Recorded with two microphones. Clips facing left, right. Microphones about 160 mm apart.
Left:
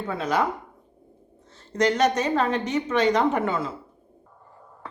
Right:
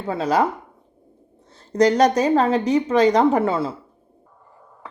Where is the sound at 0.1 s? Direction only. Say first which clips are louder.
Right 5 dB; 35° right (ahead or behind).